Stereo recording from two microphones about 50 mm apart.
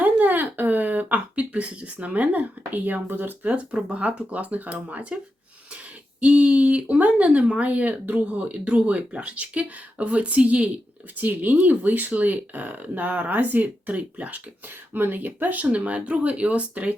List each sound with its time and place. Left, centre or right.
0.0 s a sound: right
1.4 s speech: right
14.9 s speech: right